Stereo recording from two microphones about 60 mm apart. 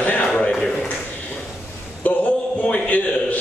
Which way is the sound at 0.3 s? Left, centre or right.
Centre.